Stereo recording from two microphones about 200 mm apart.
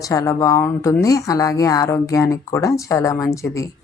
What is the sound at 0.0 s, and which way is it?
A woman's voice, 15° left (ahead or behind).